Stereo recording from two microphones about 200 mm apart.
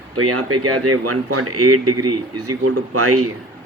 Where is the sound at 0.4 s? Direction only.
90° right.